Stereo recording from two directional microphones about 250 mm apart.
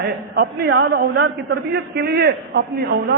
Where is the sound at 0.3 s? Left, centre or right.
Right.